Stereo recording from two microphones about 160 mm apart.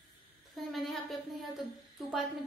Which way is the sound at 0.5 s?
Centre (ahead or behind).